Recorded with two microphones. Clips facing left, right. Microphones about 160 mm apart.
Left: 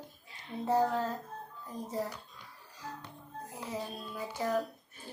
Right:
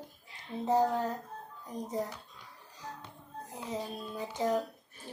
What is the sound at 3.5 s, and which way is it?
A child's voice, 20° right (ahead or behind).